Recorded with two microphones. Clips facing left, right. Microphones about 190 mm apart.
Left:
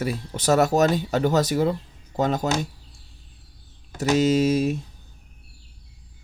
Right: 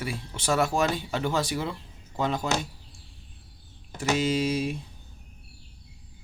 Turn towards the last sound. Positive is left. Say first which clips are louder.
# left 6 dB
turn(degrees=45)  # may be behind; listen again after turning